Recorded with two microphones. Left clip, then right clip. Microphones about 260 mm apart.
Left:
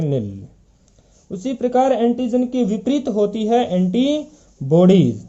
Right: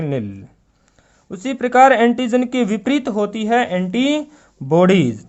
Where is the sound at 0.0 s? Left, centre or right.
Centre.